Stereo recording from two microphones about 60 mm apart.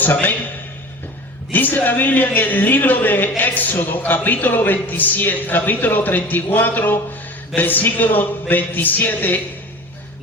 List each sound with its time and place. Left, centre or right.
0.0 s a woman's voice: left
1.5 s a woman's voice: left